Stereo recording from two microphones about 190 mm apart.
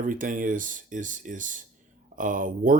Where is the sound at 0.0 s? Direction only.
45° right (ahead or behind).